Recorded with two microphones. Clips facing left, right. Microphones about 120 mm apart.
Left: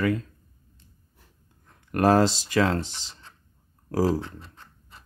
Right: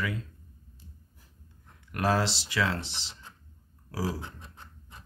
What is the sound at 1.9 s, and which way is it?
Speech, 45° left (ahead or behind).